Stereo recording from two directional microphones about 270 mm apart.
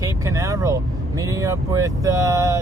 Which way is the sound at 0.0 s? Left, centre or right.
Centre.